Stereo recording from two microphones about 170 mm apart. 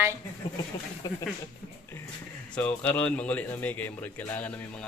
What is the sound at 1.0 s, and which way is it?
Speech, 25° left (ahead or behind).